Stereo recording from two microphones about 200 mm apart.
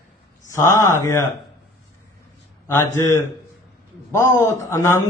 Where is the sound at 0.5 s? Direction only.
15° left (ahead or behind).